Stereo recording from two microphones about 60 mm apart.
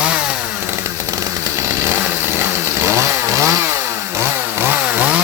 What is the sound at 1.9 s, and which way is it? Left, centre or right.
Chainsaw, right.